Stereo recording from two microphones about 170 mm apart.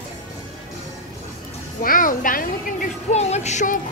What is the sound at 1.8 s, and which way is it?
A woman's voice, 55° left (ahead or behind).